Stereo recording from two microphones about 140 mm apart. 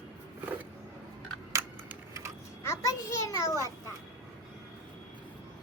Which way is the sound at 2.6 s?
20° left (ahead or behind).